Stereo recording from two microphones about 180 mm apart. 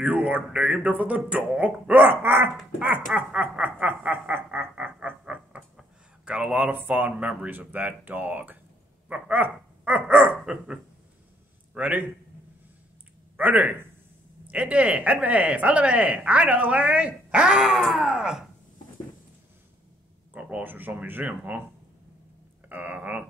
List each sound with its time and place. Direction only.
0.0 s speech: 10° right (ahead or behind)
3.1 s snicker: 5° right (ahead or behind)
9.1 s a sound: 10° right (ahead or behind)
10.4 s dog: 5° right (ahead or behind)
11.7 s a man's voice: 10° right (ahead or behind)
13.4 s speech: 10° right (ahead or behind)
20.3 s speech: 5° right (ahead or behind)
22.7 s speech: 10° right (ahead or behind)